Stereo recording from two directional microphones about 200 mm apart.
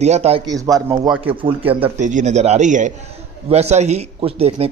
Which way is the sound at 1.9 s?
35° right (ahead or behind).